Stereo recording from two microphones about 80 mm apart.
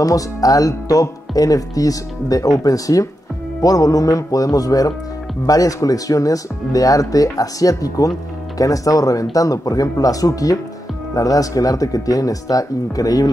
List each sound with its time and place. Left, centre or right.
0.0 s speech: left